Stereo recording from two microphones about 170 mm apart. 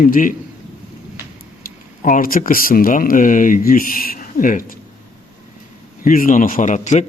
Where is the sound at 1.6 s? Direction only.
55° left (ahead or behind).